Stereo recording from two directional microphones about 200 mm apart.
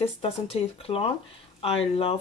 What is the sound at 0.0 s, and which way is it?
Speech, 30° left (ahead or behind).